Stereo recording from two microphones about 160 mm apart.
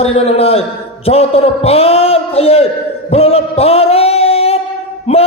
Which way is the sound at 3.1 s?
40° left (ahead or behind).